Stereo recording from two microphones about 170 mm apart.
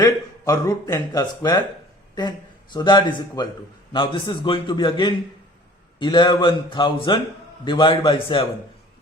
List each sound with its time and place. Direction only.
0.0 s speech: 20° left (ahead or behind)
2.7 s speech: 25° left (ahead or behind)